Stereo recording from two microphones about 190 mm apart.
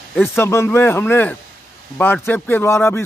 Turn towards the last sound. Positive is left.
turn(degrees=15)  # may be behind; listen again after turning